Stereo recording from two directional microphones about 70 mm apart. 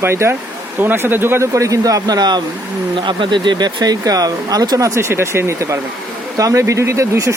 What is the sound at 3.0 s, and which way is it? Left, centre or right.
Speech, right.